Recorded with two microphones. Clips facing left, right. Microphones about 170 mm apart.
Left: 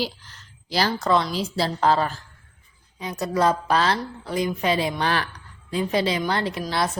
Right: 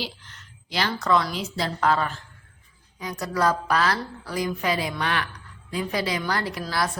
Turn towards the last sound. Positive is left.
turn(degrees=25)  # may be behind; listen again after turning